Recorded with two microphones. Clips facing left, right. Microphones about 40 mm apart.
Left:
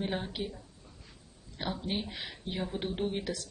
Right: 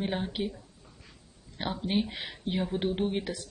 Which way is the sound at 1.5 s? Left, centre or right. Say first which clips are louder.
Right 5 dB; centre.